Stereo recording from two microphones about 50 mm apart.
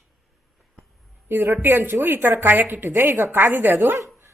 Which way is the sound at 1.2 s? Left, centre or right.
Right.